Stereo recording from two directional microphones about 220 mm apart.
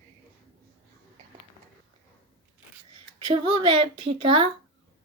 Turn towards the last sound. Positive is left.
turn(degrees=-25)  # may be behind; listen again after turning